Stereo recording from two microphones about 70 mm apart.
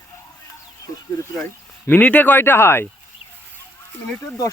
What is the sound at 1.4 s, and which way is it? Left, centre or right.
Speech, left.